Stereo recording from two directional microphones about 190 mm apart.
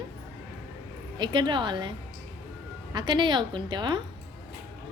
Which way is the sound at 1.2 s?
25° right (ahead or behind).